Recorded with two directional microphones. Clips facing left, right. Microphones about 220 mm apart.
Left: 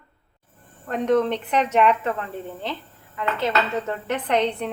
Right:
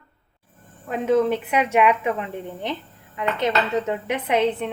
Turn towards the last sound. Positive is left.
turn(degrees=-5)  # may be behind; listen again after turning